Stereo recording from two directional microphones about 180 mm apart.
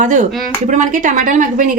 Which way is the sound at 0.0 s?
40° right (ahead or behind).